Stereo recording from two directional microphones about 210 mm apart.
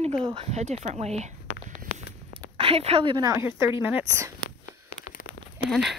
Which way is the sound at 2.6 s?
30° right (ahead or behind).